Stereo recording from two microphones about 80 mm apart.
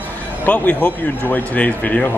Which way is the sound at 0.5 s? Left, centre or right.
Centre.